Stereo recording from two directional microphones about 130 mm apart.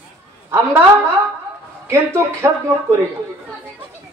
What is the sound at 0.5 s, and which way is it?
A woman's voice, 15° right (ahead or behind).